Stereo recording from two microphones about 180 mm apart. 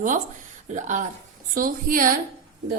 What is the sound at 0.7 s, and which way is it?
A woman's voice, 45° right (ahead or behind).